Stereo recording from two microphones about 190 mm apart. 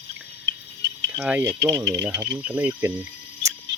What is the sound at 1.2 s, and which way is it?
Speech, 10° right (ahead or behind).